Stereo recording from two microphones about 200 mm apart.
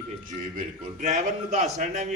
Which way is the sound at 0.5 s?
35° right (ahead or behind).